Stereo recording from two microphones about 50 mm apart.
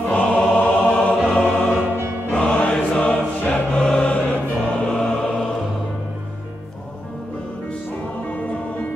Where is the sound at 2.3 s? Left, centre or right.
Centre.